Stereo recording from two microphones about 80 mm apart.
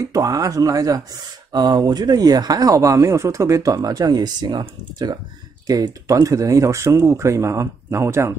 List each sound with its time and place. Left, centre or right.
0.0 s speech: right
1.5 s speech: right
5.7 s speech: right